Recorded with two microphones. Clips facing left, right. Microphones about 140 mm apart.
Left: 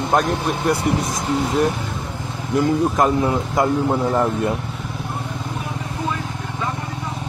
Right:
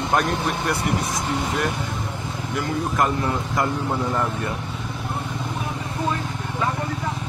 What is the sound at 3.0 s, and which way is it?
Speech, 15° left (ahead or behind).